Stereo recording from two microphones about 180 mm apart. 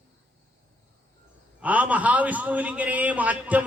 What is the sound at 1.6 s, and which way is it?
A man's voice, 10° right (ahead or behind).